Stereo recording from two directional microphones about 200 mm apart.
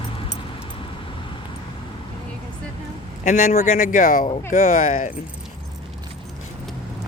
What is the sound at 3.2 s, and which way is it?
Speech, 35° left (ahead or behind).